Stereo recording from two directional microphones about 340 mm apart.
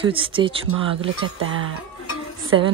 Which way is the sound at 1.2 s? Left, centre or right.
Right.